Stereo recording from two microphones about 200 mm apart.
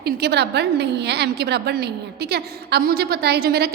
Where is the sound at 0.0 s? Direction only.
55° right (ahead or behind).